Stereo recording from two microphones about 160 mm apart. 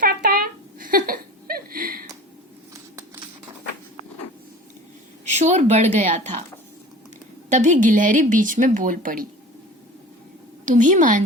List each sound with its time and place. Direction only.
0.0 s a sound: 65° right (ahead or behind)
5.3 s speech: 45° right (ahead or behind)
7.5 s a woman's voice: 50° right (ahead or behind)
10.7 s speech: 50° right (ahead or behind)